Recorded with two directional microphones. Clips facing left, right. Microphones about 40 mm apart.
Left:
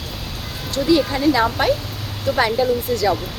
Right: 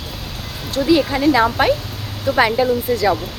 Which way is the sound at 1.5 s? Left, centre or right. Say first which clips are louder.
Right 2 dB; right.